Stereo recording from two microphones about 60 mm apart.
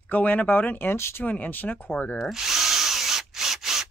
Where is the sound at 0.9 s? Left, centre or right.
Left.